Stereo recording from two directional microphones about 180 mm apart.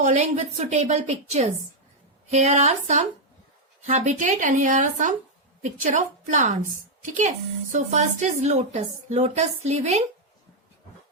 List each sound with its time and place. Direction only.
0.0 s a woman's voice: 40° right (ahead or behind)